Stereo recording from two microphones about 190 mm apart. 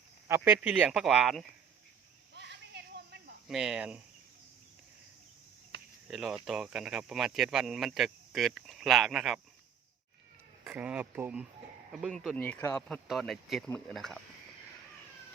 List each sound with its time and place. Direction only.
0.3 s speech: 10° right (ahead or behind)
2.3 s a sound: 65° right (ahead or behind)
3.4 s speech: centre (ahead or behind)
6.1 s speech: centre (ahead or behind)
10.6 s speech: 5° right (ahead or behind)